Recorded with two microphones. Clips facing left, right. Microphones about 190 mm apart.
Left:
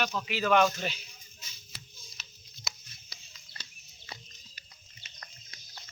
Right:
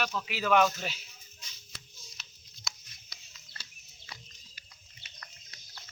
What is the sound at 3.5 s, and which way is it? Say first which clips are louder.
Chicken: left 1 dB; 15° left (ahead or behind).